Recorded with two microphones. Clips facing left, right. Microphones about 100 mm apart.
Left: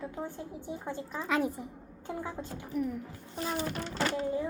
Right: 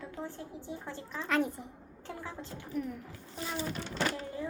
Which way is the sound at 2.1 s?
15° left (ahead or behind).